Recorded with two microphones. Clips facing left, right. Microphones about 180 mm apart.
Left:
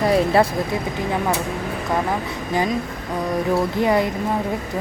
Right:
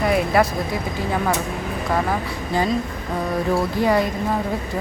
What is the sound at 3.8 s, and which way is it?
Speech, 20° left (ahead or behind).